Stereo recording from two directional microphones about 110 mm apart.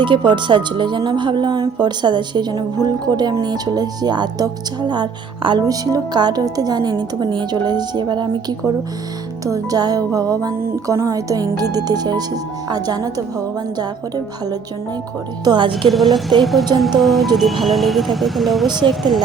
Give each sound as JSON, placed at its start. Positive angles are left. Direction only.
{"t": 0.0, "sound": "a woman's voice", "side_deg": -45}
{"t": 9.4, "sound": "a woman's voice", "side_deg": -30}
{"t": 15.4, "sound": "speech", "side_deg": -45}
{"t": 15.9, "sound": "speech", "side_deg": 0}